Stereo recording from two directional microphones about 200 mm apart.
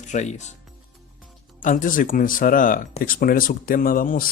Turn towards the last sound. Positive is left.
turn(degrees=45)  # may be behind; listen again after turning